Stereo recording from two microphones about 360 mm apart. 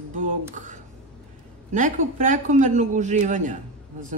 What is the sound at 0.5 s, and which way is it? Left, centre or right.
A man's voice, right.